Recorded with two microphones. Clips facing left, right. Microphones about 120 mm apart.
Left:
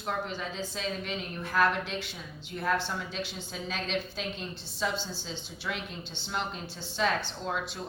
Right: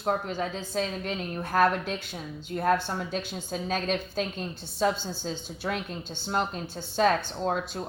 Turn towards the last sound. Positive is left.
turn(degrees=-45)  # may be behind; listen again after turning